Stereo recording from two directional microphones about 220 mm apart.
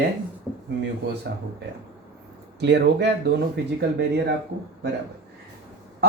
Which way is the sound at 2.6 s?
50° right (ahead or behind).